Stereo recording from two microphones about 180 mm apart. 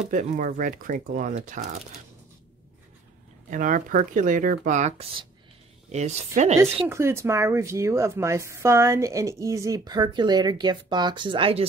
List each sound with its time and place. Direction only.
0.1 s speech: 45° right (ahead or behind)
3.4 s speech: 45° right (ahead or behind)
6.9 s a woman's voice: 15° right (ahead or behind); by 11.6 s 30° right (ahead or behind)